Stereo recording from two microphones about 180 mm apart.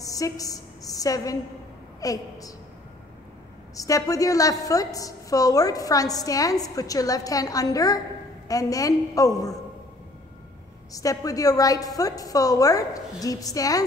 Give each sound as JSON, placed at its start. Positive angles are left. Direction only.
{"t": 0.0, "sound": "a woman's voice", "side_deg": 20}
{"t": 3.7, "sound": "a woman's voice", "side_deg": 20}
{"t": 10.9, "sound": "a woman's voice", "side_deg": 20}